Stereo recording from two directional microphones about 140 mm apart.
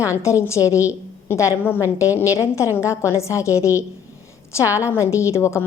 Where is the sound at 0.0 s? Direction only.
20° left (ahead or behind).